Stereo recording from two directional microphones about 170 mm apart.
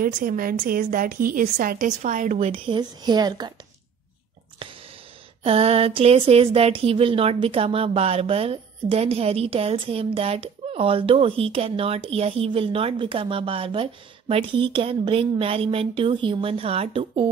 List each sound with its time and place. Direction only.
0.0 s a woman's voice: 55° right (ahead or behind)
2.3 s a woman's voice: 35° right (ahead or behind)
5.4 s speech: 35° right (ahead or behind)